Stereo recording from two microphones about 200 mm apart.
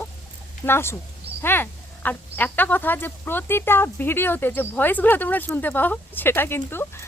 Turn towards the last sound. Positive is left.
turn(degrees=10)  # may be behind; listen again after turning